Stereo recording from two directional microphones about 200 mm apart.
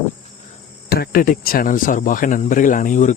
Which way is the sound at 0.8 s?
50° left (ahead or behind).